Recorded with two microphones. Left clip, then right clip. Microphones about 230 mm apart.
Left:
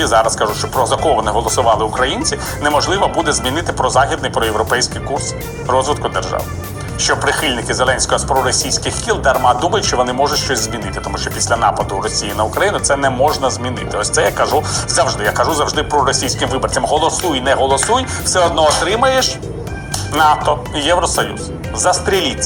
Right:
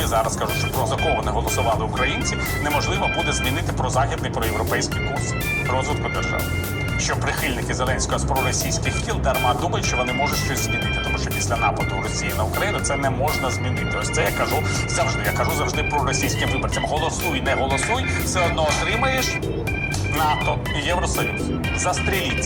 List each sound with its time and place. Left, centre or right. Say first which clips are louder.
0.0 s speech: left 9 dB; left